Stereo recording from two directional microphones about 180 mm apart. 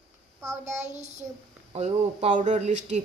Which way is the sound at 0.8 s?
40° right (ahead or behind).